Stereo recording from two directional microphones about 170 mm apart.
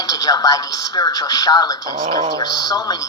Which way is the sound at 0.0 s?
20° left (ahead or behind).